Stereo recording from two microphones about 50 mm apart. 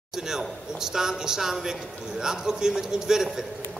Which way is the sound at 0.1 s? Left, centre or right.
Centre.